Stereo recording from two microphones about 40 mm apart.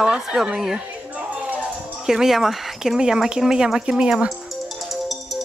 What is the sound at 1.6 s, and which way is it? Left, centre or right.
Music, centre.